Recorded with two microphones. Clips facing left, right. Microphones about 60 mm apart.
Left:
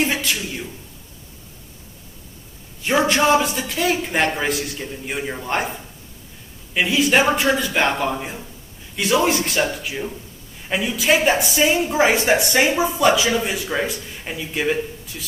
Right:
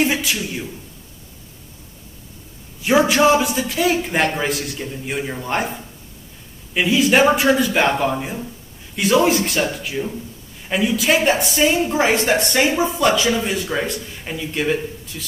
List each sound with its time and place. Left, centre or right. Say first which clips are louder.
0.0 s a man's voice: right 2 dB; centre
2.8 s a man's voice: right 3 dB; centre
6.7 s a man's voice: right 2 dB; centre